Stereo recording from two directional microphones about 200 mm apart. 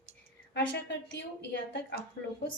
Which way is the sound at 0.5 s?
65° left (ahead or behind).